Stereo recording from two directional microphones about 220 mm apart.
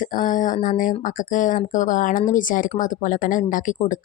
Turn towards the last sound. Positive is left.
turn(degrees=35)  # may be behind; listen again after turning